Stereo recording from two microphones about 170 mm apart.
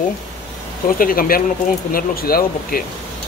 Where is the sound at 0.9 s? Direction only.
55° left (ahead or behind).